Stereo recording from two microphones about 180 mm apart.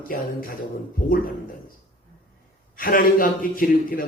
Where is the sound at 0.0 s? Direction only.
50° left (ahead or behind).